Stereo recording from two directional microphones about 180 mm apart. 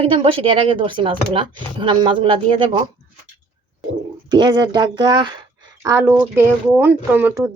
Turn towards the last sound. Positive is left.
turn(degrees=-10)  # may be behind; listen again after turning